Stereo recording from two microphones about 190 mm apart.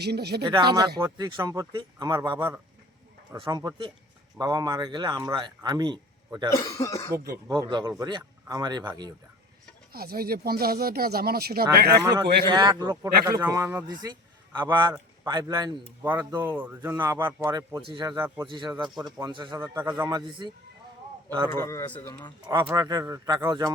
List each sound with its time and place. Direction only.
0.0 s speech: 60° right (ahead or behind)
0.4 s speech: 25° right (ahead or behind)
6.5 s a man's voice: 15° left (ahead or behind)
7.5 s speech: 25° right (ahead or behind)
9.9 s speech: 55° right (ahead or behind)
12.0 s speech: 20° right (ahead or behind)
18.1 s speech: 15° right (ahead or behind)
18.4 s speech: 25° right (ahead or behind)
19.6 s speech: 15° right (ahead or behind)
21.5 s a man's voice: 15° left (ahead or behind)
22.4 s speech: 15° right (ahead or behind)